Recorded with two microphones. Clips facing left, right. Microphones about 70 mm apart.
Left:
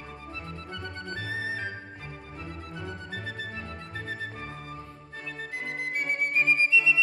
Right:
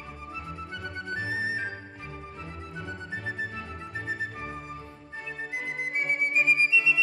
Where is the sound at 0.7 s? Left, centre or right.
Centre.